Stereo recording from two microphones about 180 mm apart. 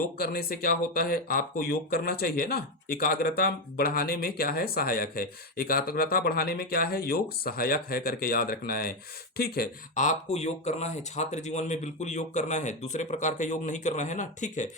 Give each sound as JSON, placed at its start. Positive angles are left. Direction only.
{"t": 0.2, "sound": "speech", "side_deg": 55}